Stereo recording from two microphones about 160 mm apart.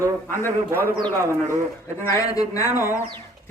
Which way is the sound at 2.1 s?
20° left (ahead or behind).